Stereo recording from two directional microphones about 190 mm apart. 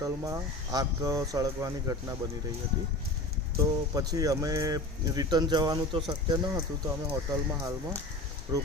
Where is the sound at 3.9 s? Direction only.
20° right (ahead or behind).